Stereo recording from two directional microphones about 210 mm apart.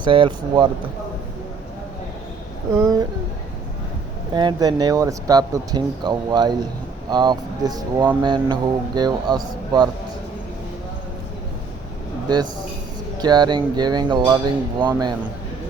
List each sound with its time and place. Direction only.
0.0 s speech: 25° right (ahead or behind)
2.7 s speech: 15° right (ahead or behind)
4.4 s speech: 20° right (ahead or behind)
13.1 s speech: 20° right (ahead or behind)